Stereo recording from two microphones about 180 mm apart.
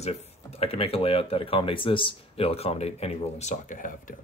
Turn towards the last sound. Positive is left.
turn(degrees=45)  # may be behind; listen again after turning